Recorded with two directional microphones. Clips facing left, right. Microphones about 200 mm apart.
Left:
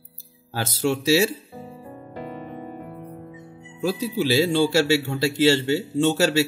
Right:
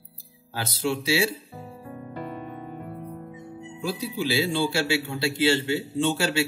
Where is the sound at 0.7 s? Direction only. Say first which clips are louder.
Left 5 dB; 45° left (ahead or behind).